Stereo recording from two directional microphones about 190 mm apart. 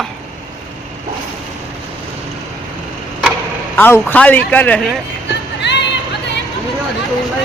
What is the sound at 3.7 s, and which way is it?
A man's voice, 10° left (ahead or behind).